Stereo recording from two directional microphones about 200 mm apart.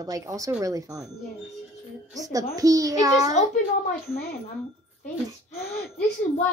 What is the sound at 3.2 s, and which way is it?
Speech, 35° left (ahead or behind).